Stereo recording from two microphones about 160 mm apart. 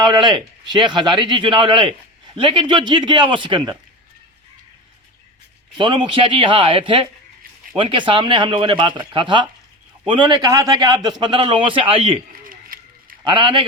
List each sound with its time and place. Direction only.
0.0 s speech: 30° right (ahead or behind)
5.7 s speech: 30° right (ahead or behind)
12.3 s a sound: 60° right (ahead or behind)
13.2 s speech: 30° right (ahead or behind)